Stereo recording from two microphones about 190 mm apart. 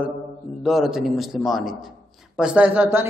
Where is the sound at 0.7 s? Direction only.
Centre (ahead or behind).